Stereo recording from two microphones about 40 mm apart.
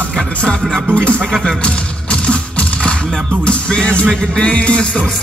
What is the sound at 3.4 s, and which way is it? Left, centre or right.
Music, left.